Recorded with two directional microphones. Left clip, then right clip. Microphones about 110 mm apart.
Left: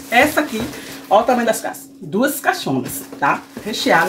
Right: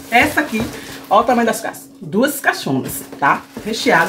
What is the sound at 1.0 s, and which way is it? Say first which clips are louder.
Speech: right 1 dB; 25° left (ahead or behind).